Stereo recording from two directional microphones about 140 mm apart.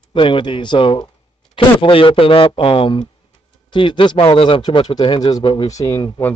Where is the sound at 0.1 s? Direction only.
35° left (ahead or behind).